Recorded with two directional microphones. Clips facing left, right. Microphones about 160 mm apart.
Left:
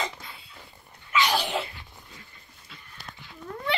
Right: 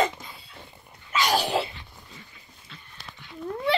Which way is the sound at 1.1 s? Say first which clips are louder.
Right 2 dB; 40° right (ahead or behind).